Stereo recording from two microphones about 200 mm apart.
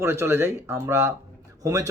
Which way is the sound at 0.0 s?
15° right (ahead or behind).